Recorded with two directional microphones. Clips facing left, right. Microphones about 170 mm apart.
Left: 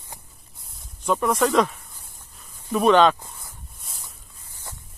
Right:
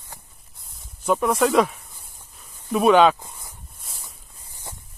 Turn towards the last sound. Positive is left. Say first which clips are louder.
# right 1 dB
turn(degrees=-20)  # may be behind; listen again after turning